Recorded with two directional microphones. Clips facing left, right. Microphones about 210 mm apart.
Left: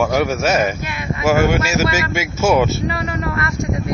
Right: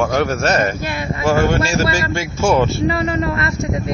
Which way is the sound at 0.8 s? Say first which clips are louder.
Right 2 dB; 35° right (ahead or behind).